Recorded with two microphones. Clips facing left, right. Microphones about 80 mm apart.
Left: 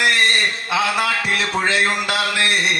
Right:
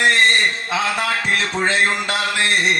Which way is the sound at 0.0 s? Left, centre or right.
Right.